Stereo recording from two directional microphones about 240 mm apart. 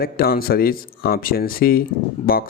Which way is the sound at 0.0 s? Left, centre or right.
Left.